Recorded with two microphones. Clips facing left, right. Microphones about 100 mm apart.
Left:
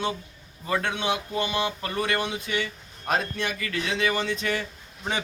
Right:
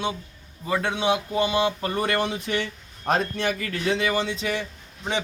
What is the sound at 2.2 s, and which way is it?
Speech, 45° right (ahead or behind).